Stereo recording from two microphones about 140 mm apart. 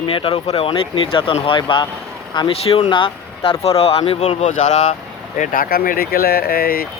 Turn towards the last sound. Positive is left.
turn(degrees=90)